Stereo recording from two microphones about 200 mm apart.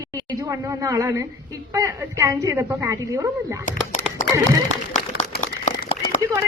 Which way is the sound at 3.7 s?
40° left (ahead or behind).